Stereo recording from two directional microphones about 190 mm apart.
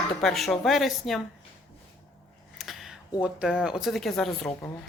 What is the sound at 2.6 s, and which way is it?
Speech, centre (ahead or behind).